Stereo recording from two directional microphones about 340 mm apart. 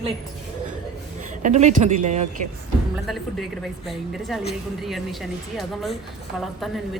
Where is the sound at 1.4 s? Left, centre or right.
Right.